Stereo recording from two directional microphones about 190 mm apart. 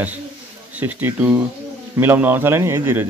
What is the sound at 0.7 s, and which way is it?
Speech, 10° right (ahead or behind).